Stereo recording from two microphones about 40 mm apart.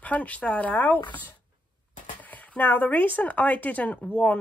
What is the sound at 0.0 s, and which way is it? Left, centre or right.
Speech, left.